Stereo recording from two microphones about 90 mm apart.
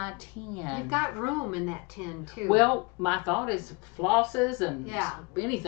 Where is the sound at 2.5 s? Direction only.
10° left (ahead or behind).